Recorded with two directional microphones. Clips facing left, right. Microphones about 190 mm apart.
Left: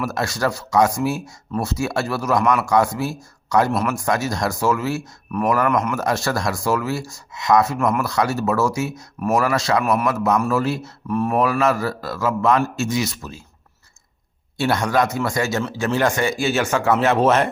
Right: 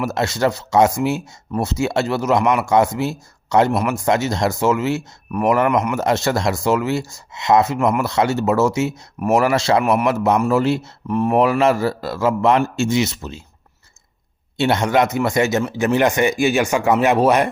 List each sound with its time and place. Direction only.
0.0 s speech: 25° right (ahead or behind)
14.6 s speech: 25° right (ahead or behind)